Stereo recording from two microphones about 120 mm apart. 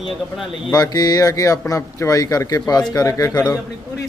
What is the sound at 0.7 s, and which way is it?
Speech, 30° left (ahead or behind).